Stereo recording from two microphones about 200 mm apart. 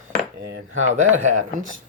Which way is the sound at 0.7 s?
35° right (ahead or behind).